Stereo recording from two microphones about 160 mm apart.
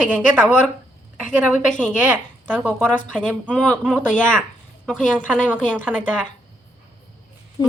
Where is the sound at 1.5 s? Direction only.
50° left (ahead or behind).